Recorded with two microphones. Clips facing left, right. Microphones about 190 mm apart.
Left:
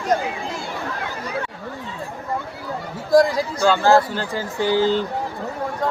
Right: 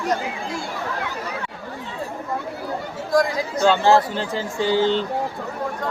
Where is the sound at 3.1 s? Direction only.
35° left (ahead or behind).